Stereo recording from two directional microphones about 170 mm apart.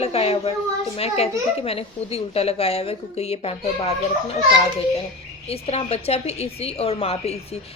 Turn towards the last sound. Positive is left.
turn(degrees=35)  # may be behind; listen again after turning